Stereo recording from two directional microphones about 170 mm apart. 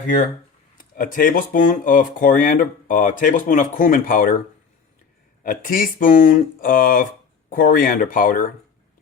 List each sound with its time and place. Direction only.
0.8 s speech: 55° left (ahead or behind)
5.4 s speech: 55° left (ahead or behind)